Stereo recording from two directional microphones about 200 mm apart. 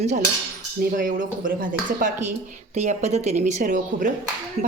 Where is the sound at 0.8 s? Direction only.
45° right (ahead or behind).